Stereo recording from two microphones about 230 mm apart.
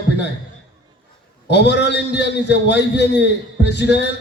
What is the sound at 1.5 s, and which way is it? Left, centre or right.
A man's voice, left.